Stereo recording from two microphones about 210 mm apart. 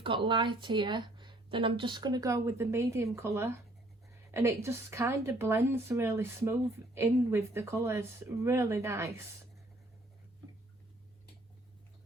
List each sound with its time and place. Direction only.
0.0 s a woman's voice: 25° right (ahead or behind)